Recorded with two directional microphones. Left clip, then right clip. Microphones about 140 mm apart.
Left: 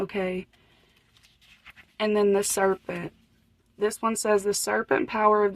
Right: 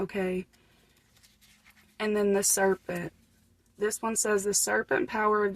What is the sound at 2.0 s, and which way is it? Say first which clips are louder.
Speech: left 4 dB; 25° left (ahead or behind).